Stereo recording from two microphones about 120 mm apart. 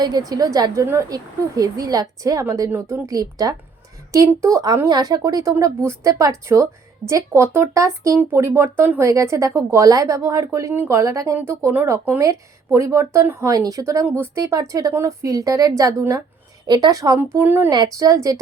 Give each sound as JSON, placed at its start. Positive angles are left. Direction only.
{"t": 0.0, "sound": "a woman's voice", "side_deg": -35}
{"t": 17.2, "sound": "speech", "side_deg": -20}
{"t": 17.7, "sound": "speech", "side_deg": -30}